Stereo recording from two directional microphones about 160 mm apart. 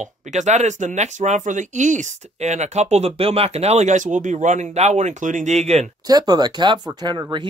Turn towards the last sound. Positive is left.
turn(degrees=-30)  # may be behind; listen again after turning